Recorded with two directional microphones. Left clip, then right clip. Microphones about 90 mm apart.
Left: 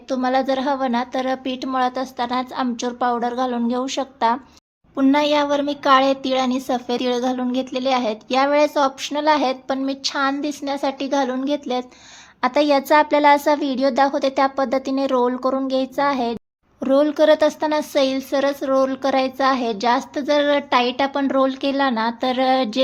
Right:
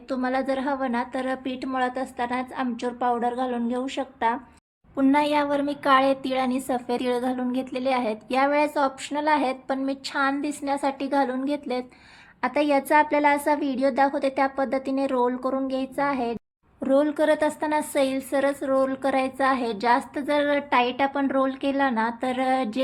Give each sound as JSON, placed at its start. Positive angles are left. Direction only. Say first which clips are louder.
{"t": 0.1, "sound": "a woman's voice", "louder": "left 6 dB", "side_deg": 20}
{"t": 4.9, "sound": "a woman's voice", "louder": "left 4 dB", "side_deg": 20}